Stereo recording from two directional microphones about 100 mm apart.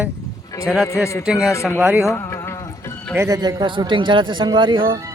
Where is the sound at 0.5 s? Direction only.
30° left (ahead or behind).